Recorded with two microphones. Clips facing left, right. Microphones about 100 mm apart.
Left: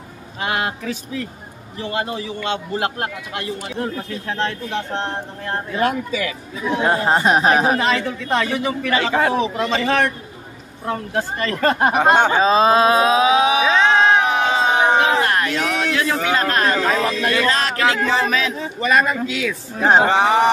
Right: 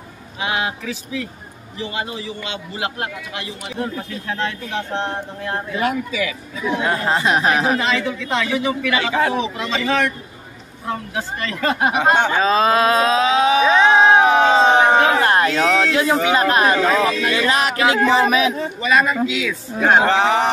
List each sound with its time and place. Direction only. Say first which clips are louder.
0.4 s a man's voice: even; 45° left (ahead or behind)
12.1 s speech: left 2 dB; 20° left (ahead or behind)
13.7 s music: right 2 dB; 5° right (ahead or behind)
14.0 s a sound: right 4 dB; 25° right (ahead or behind)
16.2 s a man's voice: right 3 dB; 15° right (ahead or behind)
16.7 s a man's voice: right 2 dB; 5° right (ahead or behind)
17.7 s a sound: right 2 dB; 25° right (ahead or behind)
18.0 s speech: right 4 dB; 5° right (ahead or behind)
19.2 s speech: right 1 dB; 40° left (ahead or behind)
20.1 s speech: left 1 dB; 15° left (ahead or behind)